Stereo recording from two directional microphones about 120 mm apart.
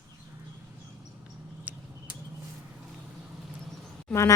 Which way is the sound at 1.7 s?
15° right (ahead or behind).